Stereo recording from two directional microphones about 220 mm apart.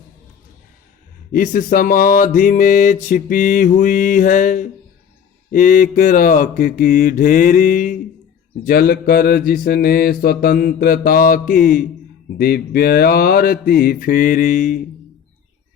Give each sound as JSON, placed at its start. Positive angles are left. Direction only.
{"t": 1.3, "sound": "music", "side_deg": 40}
{"t": 12.4, "sound": "mantra", "side_deg": 45}
{"t": 13.8, "sound": "music", "side_deg": 40}